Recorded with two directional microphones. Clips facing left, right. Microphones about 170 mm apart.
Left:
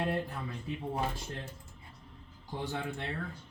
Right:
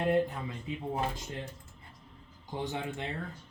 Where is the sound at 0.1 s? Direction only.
20° right (ahead or behind).